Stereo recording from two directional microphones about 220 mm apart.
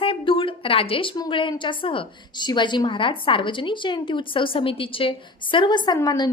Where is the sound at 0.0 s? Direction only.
25° left (ahead or behind).